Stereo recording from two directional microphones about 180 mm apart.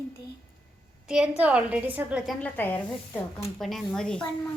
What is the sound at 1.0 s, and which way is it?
A woman's voice, 5° right (ahead or behind).